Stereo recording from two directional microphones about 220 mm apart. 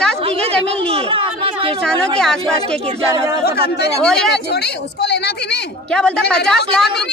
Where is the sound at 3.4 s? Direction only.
45° left (ahead or behind).